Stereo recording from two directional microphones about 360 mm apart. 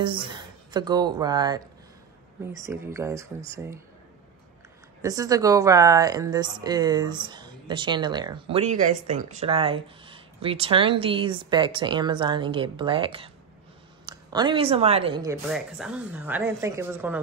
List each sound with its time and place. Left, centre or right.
0.0 s speech: centre
2.6 s speech: centre
5.0 s speech: centre